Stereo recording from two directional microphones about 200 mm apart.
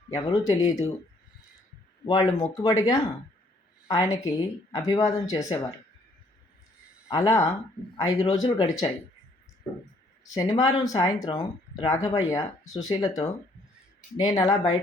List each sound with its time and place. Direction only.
0.3 s speech: 15° left (ahead or behind)
2.0 s speech: 15° left (ahead or behind)
7.1 s speech: 15° left (ahead or behind)
10.3 s speech: 20° left (ahead or behind)